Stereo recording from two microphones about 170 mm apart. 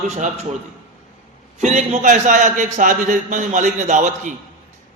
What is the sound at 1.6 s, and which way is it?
A man's voice, 40° right (ahead or behind).